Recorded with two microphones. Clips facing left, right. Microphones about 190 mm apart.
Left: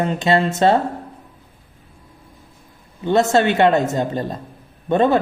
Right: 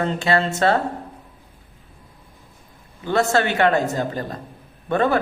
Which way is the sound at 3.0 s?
20° left (ahead or behind).